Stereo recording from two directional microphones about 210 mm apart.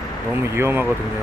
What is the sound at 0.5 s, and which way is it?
Speech, 10° right (ahead or behind).